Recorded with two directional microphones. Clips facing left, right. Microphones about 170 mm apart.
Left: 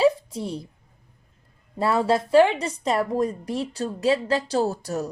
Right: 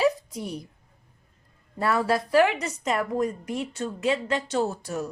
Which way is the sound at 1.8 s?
25° left (ahead or behind).